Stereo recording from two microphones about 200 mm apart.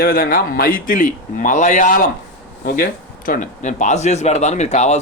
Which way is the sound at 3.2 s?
40° left (ahead or behind).